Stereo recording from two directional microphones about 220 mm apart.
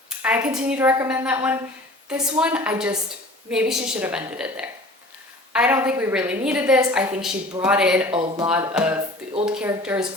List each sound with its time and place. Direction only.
0.2 s a woman's voice: 5° right (ahead or behind)
8.1 s speech: 25° right (ahead or behind)
8.4 s a woman's voice: 5° right (ahead or behind)